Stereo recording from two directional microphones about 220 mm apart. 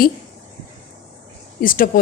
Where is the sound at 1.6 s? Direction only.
40° left (ahead or behind).